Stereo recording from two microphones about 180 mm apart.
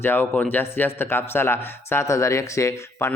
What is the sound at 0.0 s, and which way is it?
Speech, 10° left (ahead or behind).